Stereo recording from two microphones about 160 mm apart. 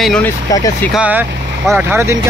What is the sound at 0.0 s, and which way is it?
Speech, 5° left (ahead or behind).